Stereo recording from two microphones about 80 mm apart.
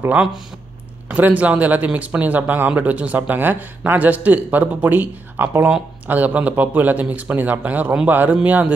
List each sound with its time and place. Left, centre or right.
0.1 s speech: centre